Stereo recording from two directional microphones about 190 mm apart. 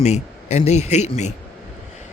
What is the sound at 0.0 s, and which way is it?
Speech, 35° left (ahead or behind).